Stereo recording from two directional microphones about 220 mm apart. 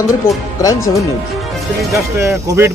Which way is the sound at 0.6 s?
15° left (ahead or behind).